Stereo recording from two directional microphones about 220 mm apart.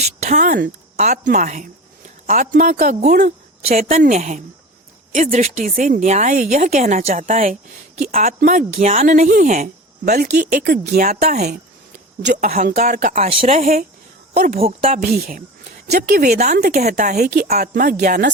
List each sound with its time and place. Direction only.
0.2 s speech: 35° right (ahead or behind)
14.3 s speech: 45° right (ahead or behind)
14.6 s speech: 30° right (ahead or behind)
15.1 s speech: 40° right (ahead or behind)
16.3 s speech: 30° right (ahead or behind)
16.6 s speech: 45° right (ahead or behind)